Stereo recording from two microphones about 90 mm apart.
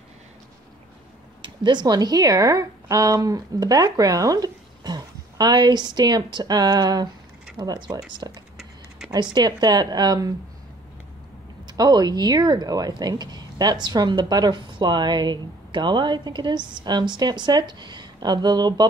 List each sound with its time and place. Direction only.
1.4 s speech: 60° right (ahead or behind)
11.6 s speech: 50° right (ahead or behind)